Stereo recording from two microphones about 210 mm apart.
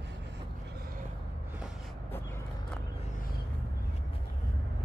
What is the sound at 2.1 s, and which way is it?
Vehicle, 10° left (ahead or behind).